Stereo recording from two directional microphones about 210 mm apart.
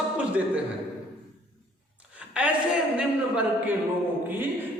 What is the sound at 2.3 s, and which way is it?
A woman's voice, 5° right (ahead or behind).